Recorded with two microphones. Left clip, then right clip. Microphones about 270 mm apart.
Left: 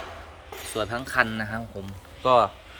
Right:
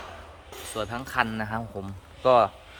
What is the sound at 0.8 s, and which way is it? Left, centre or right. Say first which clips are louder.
A man's voice: left 3 dB; centre.